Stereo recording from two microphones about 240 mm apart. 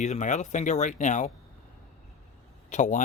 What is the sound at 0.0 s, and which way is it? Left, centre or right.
Speech, left.